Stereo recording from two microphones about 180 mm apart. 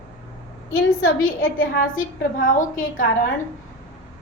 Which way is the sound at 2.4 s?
45° left (ahead or behind).